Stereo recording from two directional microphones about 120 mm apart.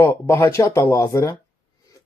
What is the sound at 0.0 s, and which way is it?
Speech, 20° left (ahead or behind).